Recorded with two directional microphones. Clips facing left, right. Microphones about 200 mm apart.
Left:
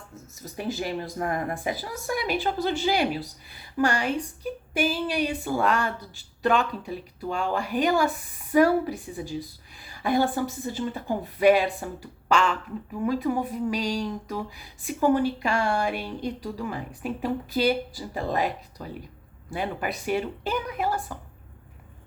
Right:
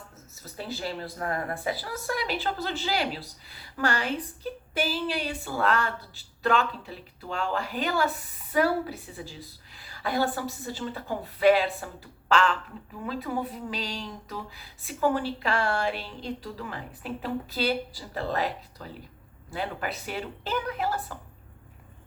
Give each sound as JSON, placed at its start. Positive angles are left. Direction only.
{"t": 0.1, "sound": "a woman's voice", "side_deg": 15}